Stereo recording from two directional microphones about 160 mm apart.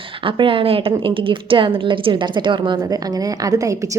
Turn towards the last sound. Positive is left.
turn(degrees=-20)  # may be behind; listen again after turning